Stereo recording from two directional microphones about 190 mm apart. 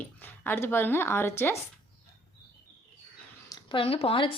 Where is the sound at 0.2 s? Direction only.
10° left (ahead or behind).